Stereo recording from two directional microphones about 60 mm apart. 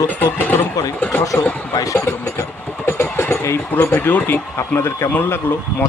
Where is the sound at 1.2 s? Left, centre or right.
Left.